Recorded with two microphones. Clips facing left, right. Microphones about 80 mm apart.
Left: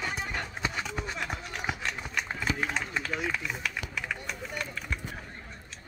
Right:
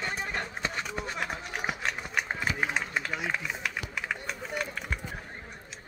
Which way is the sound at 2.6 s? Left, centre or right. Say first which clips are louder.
Right 1 dB; centre.